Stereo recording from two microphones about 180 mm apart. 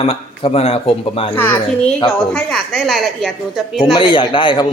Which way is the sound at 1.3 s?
10° left (ahead or behind).